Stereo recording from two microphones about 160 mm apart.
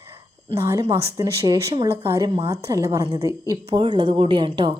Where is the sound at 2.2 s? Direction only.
30° right (ahead or behind).